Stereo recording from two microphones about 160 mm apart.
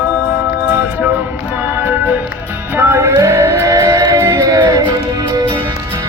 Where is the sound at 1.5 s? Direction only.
15° right (ahead or behind).